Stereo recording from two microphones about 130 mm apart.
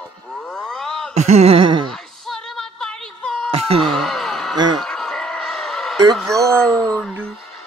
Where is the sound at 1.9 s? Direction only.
5° left (ahead or behind).